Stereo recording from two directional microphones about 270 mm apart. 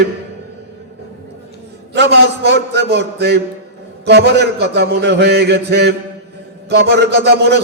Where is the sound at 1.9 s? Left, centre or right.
Right.